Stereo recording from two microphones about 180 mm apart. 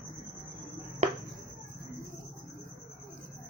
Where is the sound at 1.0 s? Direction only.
40° right (ahead or behind).